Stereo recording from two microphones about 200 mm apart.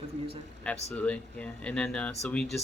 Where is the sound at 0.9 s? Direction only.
5° left (ahead or behind).